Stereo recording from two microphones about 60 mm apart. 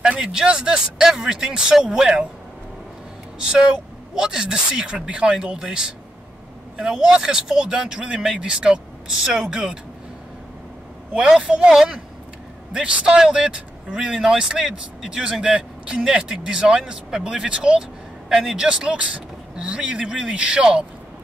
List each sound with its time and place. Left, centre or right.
0.1 s speech: centre
3.3 s speech: centre
11.4 s speech: centre
12.7 s speech: centre